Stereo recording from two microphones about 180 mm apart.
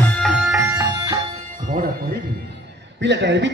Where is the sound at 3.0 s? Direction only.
75° right (ahead or behind).